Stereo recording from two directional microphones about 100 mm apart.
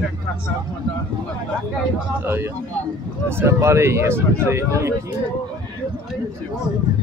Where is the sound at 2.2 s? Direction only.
20° right (ahead or behind).